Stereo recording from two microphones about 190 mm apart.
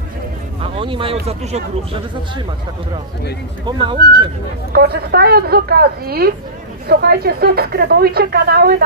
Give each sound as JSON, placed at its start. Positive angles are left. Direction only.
{"t": 0.6, "sound": "speech", "side_deg": -25}
{"t": 3.6, "sound": "speech", "side_deg": -25}
{"t": 4.7, "sound": "speech", "side_deg": -55}